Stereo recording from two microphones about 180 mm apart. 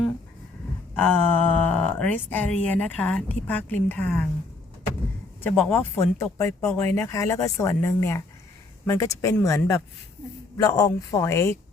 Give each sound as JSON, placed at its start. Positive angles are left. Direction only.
{"t": 0.9, "sound": "speech", "side_deg": 10}
{"t": 5.4, "sound": "speech", "side_deg": 10}